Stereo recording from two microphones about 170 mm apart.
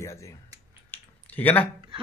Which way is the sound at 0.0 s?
15° left (ahead or behind).